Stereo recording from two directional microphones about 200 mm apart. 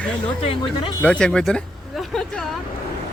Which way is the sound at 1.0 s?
5° left (ahead or behind).